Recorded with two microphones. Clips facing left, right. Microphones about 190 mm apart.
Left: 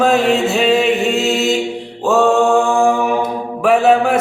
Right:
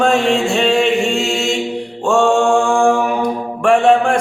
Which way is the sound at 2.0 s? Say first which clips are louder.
Left 1 dB; 5° left (ahead or behind).